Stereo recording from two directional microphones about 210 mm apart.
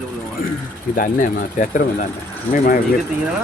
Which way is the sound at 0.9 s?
40° left (ahead or behind).